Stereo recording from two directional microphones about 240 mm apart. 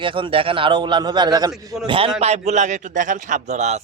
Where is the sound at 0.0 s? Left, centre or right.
Right.